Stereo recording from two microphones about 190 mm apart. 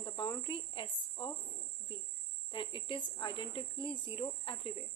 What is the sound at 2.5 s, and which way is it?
Speech, 30° left (ahead or behind).